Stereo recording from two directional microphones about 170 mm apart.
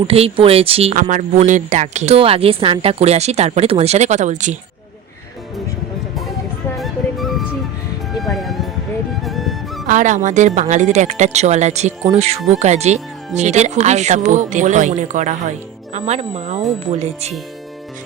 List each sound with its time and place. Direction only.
0.1 s speech: 35° right (ahead or behind)
6.7 s music: centre (ahead or behind)
9.8 s speech: 50° right (ahead or behind)